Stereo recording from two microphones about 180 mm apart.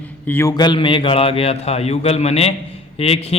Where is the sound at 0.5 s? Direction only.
25° left (ahead or behind).